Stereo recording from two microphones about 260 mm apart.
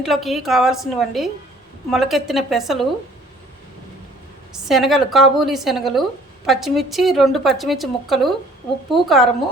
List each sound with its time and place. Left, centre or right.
0.0 s a woman's voice: centre
4.5 s a woman's voice: centre